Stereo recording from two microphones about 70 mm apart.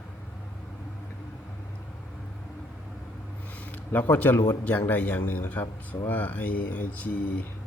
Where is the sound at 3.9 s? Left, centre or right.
Left.